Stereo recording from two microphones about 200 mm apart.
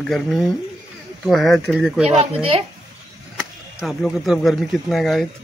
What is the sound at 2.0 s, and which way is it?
Speech, 30° right (ahead or behind).